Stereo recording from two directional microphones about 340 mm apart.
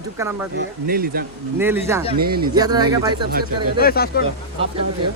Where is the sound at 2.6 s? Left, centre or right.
Centre.